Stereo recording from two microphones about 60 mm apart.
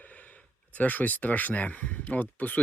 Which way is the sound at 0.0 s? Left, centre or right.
Left.